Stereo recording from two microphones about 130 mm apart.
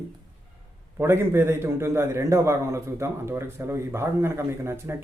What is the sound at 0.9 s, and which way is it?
A man's voice, 20° right (ahead or behind).